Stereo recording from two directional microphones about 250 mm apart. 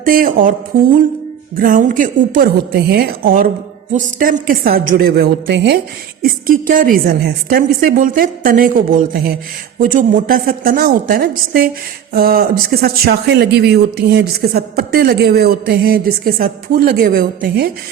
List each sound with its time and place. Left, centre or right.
0.0 s speech: right
1.5 s speech: right